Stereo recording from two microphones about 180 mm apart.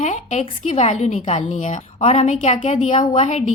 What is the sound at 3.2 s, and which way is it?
Speech, 40° left (ahead or behind).